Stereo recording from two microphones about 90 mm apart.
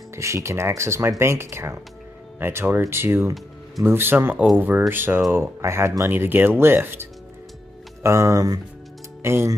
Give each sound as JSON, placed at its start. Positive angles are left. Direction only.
{"t": 0.1, "sound": "speech", "side_deg": -30}
{"t": 9.2, "sound": "speech", "side_deg": -30}